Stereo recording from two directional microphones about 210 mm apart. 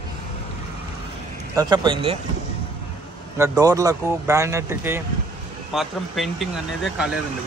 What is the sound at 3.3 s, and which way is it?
Speech, 15° right (ahead or behind).